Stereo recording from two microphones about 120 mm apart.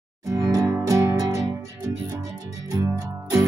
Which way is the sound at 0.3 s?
30° right (ahead or behind).